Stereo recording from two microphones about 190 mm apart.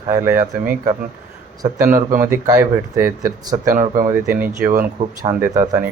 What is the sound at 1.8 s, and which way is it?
Speech, 45° right (ahead or behind).